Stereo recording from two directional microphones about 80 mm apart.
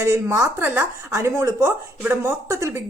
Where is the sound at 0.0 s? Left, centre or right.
Right.